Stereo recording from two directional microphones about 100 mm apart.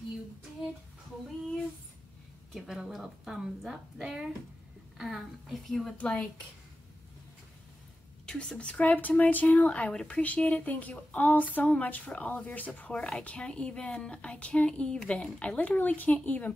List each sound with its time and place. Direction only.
2.5 s a woman's voice: 5° right (ahead or behind); by 6.2 s 10° left (ahead or behind)
8.3 s speech: 10° left (ahead or behind)